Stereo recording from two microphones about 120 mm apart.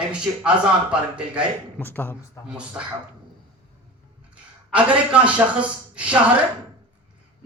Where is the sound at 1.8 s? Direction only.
15° left (ahead or behind).